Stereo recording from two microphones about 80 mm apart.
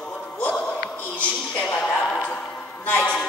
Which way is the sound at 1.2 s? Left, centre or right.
Centre.